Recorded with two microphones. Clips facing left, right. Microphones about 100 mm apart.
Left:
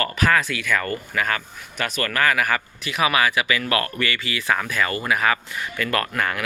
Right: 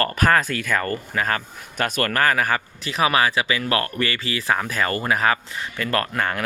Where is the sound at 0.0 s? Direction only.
45° right (ahead or behind).